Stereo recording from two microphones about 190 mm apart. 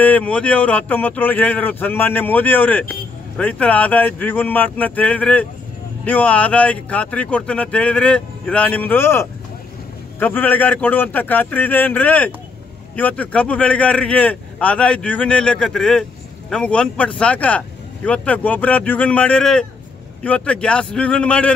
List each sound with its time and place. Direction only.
0.0 s speech: 10° left (ahead or behind)